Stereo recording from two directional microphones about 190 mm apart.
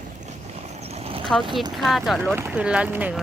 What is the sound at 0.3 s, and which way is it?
Vehicle, 35° right (ahead or behind).